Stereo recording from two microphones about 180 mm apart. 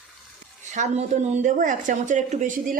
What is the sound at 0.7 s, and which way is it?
Speech, 40° right (ahead or behind).